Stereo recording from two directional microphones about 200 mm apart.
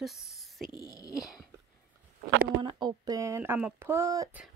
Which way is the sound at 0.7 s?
20° left (ahead or behind).